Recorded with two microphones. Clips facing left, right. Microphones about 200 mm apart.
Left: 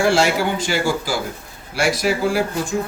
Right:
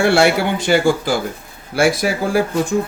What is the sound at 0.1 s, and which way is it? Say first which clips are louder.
Speech: right 3 dB; 60° right (ahead or behind).